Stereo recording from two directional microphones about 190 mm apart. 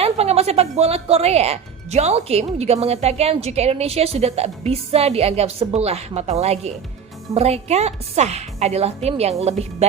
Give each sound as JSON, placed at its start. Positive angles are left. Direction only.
{"t": 0.0, "sound": "speech", "side_deg": -30}